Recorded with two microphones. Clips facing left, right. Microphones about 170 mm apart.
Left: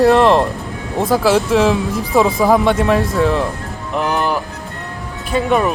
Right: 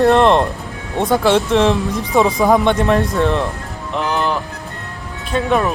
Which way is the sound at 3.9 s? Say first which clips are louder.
Left 1 dB; 5° left (ahead or behind).